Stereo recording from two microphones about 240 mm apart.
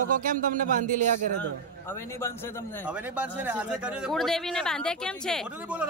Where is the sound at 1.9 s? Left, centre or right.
Centre.